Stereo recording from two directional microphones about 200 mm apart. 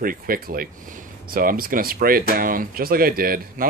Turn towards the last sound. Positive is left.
turn(degrees=-45)  # may be behind; listen again after turning